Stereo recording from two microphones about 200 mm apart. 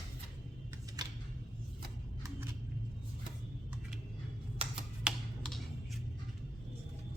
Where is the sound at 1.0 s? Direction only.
20° right (ahead or behind).